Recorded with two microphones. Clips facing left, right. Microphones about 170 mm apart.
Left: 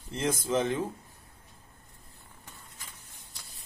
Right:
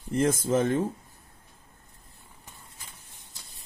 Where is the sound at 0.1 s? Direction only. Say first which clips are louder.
Right 5 dB; 50° right (ahead or behind).